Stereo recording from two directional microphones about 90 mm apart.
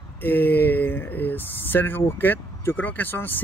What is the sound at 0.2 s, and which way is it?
Speech, 20° left (ahead or behind).